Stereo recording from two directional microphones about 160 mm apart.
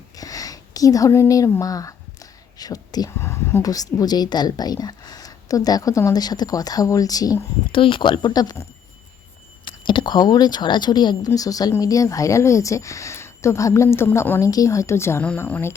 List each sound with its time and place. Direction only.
0.2 s speech: 20° left (ahead or behind)
9.6 s speech: 30° left (ahead or behind); by 15.7 s 10° left (ahead or behind)